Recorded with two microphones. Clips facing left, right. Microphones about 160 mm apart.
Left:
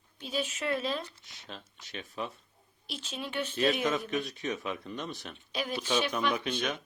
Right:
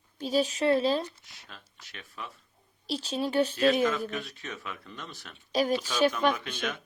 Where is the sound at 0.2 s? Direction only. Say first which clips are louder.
Right 8 dB; 35° right (ahead or behind).